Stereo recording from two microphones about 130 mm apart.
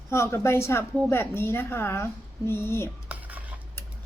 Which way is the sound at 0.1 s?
20° left (ahead or behind).